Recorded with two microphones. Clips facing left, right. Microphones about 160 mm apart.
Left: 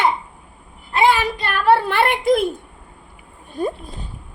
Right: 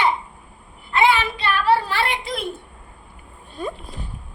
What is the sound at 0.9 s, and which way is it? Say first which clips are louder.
A woman's voice: left 2 dB; 40° left (ahead or behind).